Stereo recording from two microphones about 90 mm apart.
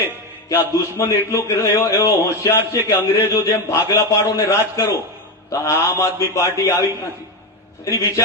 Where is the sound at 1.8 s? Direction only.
40° left (ahead or behind).